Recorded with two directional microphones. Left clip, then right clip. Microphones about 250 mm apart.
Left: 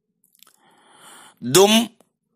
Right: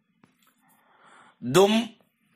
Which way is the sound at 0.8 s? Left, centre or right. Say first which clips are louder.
Left 7 dB; left.